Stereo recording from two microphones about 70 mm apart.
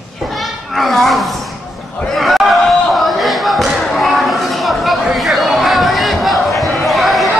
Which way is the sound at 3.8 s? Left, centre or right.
Centre.